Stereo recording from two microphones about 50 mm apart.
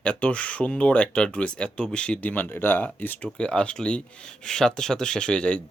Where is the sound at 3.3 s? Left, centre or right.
Centre.